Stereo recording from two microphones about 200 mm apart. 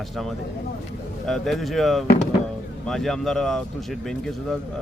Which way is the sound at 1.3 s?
Centre (ahead or behind).